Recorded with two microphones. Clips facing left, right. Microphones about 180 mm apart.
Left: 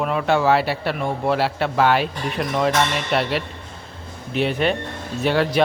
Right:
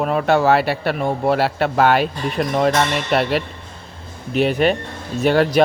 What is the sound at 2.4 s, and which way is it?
Speech, 40° right (ahead or behind).